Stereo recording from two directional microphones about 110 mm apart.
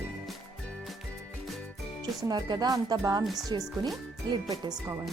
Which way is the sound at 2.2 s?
40° right (ahead or behind).